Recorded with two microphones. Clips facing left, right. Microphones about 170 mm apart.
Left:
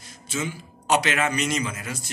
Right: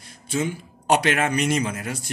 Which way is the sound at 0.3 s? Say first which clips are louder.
Right 5 dB; 55° right (ahead or behind).